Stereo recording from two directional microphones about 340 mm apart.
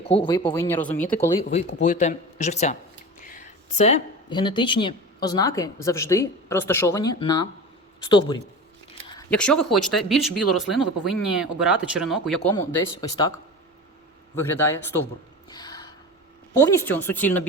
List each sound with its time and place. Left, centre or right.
0.0 s speech: centre
1.5 s speech: left
9.1 s speech: centre
12.5 s speech: centre
14.3 s speech: centre
15.4 s a sound: centre
16.6 s speech: centre